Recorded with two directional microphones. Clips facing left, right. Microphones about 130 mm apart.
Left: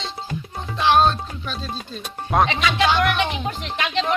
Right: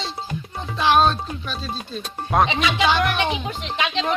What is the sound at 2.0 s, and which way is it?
A woman's voice, centre (ahead or behind).